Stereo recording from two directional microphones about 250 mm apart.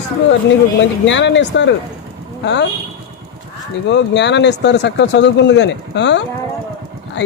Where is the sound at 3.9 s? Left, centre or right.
Left.